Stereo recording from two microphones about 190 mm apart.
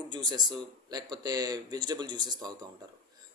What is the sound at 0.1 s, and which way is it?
Speech, 20° right (ahead or behind).